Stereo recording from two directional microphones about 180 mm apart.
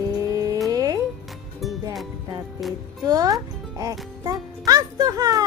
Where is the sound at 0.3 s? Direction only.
20° right (ahead or behind).